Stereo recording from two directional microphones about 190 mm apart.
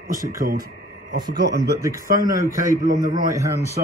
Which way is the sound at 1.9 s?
45° right (ahead or behind).